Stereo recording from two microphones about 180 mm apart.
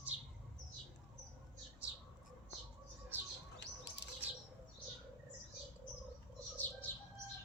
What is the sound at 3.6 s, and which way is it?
Bird, 70° left (ahead or behind).